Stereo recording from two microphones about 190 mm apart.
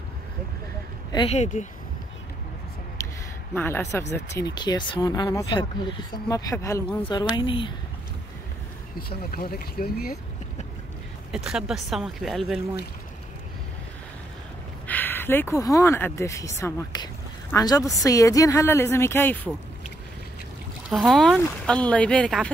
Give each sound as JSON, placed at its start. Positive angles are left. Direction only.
{"t": 1.1, "sound": "speech", "side_deg": 30}
{"t": 3.5, "sound": "speech", "side_deg": 10}
{"t": 8.9, "sound": "speech", "side_deg": 50}
{"t": 11.3, "sound": "speech", "side_deg": -5}
{"t": 14.9, "sound": "speech", "side_deg": 10}
{"t": 20.9, "sound": "speech", "side_deg": 0}